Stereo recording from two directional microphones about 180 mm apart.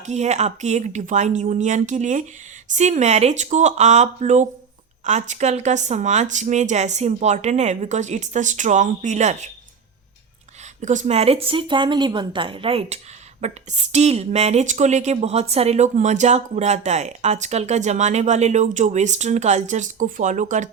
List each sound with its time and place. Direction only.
0.0 s speech: 40° right (ahead or behind)
10.8 s speech: 40° right (ahead or behind)